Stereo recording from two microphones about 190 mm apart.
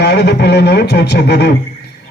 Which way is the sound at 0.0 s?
60° left (ahead or behind).